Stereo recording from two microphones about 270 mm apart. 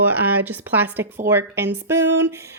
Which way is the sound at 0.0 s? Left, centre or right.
Centre.